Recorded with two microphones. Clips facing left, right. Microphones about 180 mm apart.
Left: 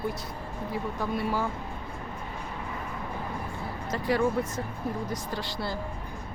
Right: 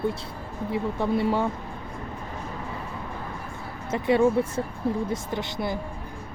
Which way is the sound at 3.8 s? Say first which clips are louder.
Right 6 dB; 25° right (ahead or behind).